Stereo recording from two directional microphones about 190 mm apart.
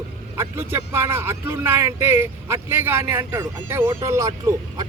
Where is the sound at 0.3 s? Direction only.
15° right (ahead or behind).